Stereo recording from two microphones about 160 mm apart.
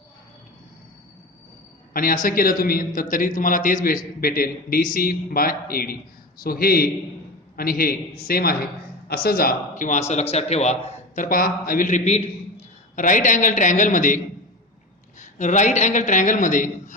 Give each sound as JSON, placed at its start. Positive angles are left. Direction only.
{"t": 1.9, "sound": "a man's voice", "side_deg": 65}
{"t": 13.0, "sound": "a man's voice", "side_deg": 55}
{"t": 15.2, "sound": "a man's voice", "side_deg": 50}